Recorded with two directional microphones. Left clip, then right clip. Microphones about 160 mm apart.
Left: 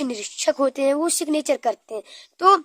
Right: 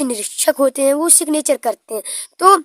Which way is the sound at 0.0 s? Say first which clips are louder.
Right 5 dB; 35° right (ahead or behind).